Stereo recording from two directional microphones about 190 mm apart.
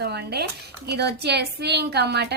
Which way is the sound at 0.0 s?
60° right (ahead or behind).